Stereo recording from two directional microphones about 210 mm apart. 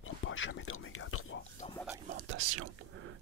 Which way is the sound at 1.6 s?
30° left (ahead or behind).